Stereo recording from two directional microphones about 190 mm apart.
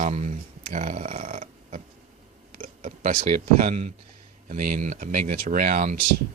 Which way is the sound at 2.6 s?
40° right (ahead or behind).